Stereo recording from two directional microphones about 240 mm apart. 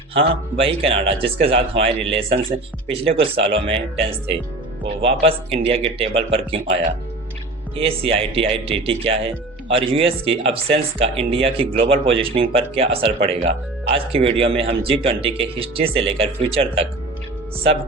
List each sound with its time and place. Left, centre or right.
0.1 s speech: right
7.8 s speech: right